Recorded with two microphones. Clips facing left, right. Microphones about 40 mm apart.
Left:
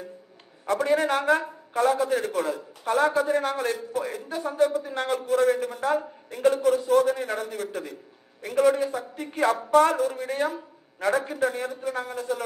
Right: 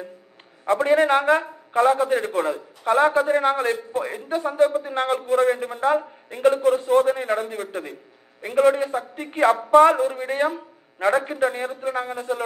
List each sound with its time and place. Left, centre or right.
0.7 s a man's voice: right